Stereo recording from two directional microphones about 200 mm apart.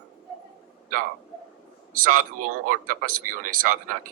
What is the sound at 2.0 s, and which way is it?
Speech, 40° right (ahead or behind).